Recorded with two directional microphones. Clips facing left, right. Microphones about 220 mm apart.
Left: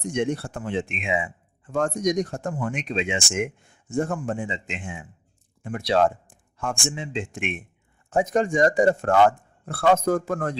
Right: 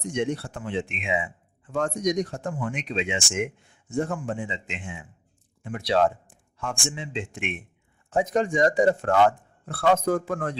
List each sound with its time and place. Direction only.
0.0 s a man's voice: 45° left (ahead or behind)